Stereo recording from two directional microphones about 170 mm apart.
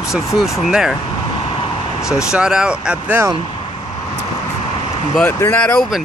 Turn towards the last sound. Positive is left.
turn(degrees=5)  # may be behind; listen again after turning